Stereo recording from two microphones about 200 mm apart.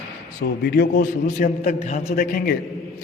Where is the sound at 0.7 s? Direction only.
45° left (ahead or behind).